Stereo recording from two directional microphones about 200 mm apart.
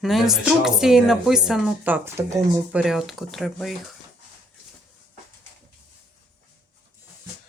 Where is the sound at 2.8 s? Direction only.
Centre (ahead or behind).